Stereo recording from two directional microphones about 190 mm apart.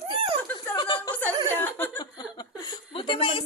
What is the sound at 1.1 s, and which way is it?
Speech, 10° left (ahead or behind).